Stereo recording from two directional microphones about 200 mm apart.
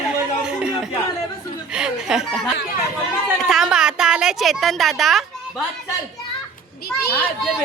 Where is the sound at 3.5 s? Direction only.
5° right (ahead or behind).